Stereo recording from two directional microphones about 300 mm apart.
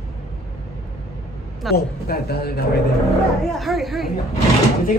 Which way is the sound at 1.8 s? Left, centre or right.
Left.